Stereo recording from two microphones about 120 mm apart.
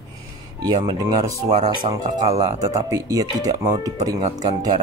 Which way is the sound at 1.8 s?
50° right (ahead or behind).